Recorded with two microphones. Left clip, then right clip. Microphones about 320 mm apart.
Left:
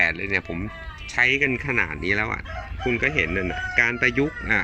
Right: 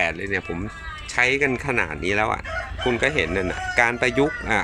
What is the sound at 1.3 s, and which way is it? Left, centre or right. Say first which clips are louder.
Speech: right 1 dB; right.